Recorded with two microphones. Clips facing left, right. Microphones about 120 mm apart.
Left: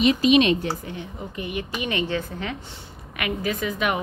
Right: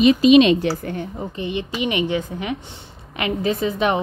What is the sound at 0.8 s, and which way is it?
Speech, 55° right (ahead or behind).